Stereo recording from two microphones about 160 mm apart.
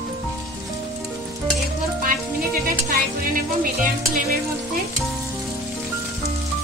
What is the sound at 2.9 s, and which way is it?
Speech, 60° right (ahead or behind).